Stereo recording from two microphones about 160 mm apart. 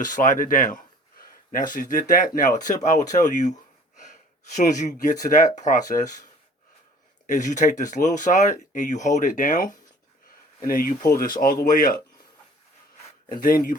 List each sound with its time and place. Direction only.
0.0 s speech: 55° left (ahead or behind)
4.5 s speech: 50° left (ahead or behind)
7.3 s speech: 50° left (ahead or behind)
13.4 s speech: 60° left (ahead or behind)